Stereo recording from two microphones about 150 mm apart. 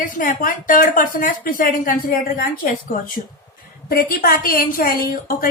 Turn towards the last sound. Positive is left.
turn(degrees=75)  # may be behind; listen again after turning